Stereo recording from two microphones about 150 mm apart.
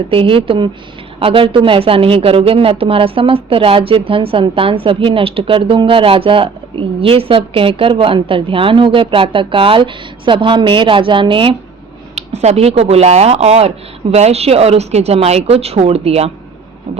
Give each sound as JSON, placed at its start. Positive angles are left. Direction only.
{"t": 0.1, "sound": "speech", "side_deg": -35}
{"t": 12.1, "sound": "speech", "side_deg": -50}